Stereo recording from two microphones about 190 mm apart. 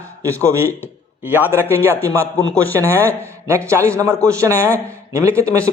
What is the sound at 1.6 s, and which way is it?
Speech, 10° left (ahead or behind).